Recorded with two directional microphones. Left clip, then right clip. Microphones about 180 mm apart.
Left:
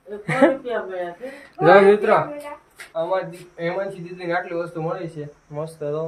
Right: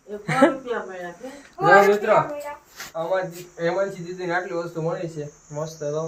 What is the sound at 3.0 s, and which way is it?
Speech, 10° right (ahead or behind).